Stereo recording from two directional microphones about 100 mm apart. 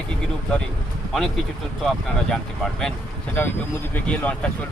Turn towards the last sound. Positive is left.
turn(degrees=10)  # may be behind; listen again after turning